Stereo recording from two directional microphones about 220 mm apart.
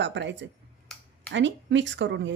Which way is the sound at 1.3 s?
55° right (ahead or behind).